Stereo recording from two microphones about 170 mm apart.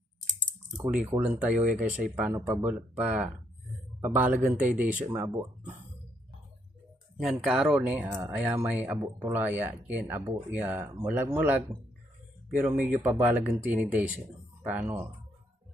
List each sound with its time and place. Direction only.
1.1 s speech: 10° right (ahead or behind)
7.2 s speech: centre (ahead or behind)